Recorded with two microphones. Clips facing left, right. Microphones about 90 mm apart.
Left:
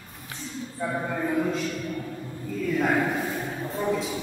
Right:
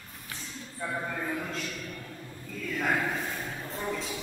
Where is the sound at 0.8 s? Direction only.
15° left (ahead or behind).